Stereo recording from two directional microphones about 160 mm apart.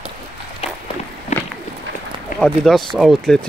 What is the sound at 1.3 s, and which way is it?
Run, 45° left (ahead or behind).